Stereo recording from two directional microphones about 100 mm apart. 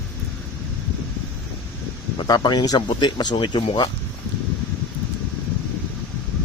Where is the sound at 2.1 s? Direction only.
45° left (ahead or behind).